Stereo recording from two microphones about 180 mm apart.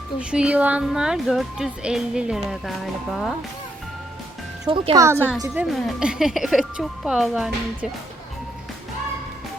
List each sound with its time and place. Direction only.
0.2 s speech: 5° right (ahead or behind)
4.6 s speech: 25° right (ahead or behind)
5.5 s speech: centre (ahead or behind)